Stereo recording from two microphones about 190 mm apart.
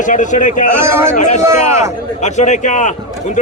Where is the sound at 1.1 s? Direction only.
40° left (ahead or behind).